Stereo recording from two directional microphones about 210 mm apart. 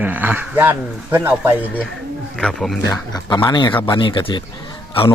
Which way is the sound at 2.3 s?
Centre (ahead or behind).